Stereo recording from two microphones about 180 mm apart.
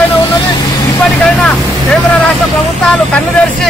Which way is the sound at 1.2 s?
5° left (ahead or behind).